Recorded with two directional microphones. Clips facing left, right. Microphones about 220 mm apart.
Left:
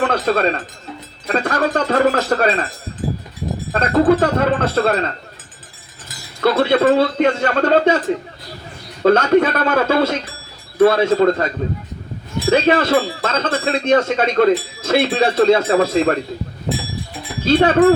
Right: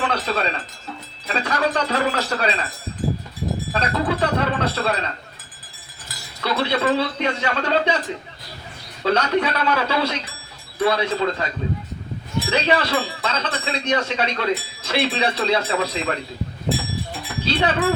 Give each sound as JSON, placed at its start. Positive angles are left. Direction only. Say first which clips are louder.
{"t": 0.0, "sound": "speech", "louder": "left 7 dB", "side_deg": 50}
{"t": 3.7, "sound": "speech", "louder": "left 11 dB", "side_deg": 50}
{"t": 6.4, "sound": "speech", "louder": "left 8 dB", "side_deg": 50}
{"t": 9.0, "sound": "speech", "louder": "left 7 dB", "side_deg": 50}
{"t": 12.5, "sound": "speech", "louder": "left 7 dB", "side_deg": 50}
{"t": 17.4, "sound": "speech", "louder": "left 9 dB", "side_deg": 50}